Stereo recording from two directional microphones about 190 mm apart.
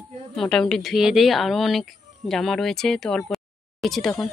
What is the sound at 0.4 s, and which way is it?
A woman's voice, 5° left (ahead or behind).